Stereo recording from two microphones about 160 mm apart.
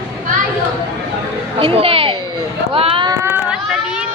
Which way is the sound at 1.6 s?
35° right (ahead or behind).